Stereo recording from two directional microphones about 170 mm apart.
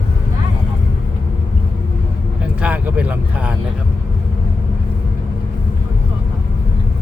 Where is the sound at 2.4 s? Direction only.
10° right (ahead or behind).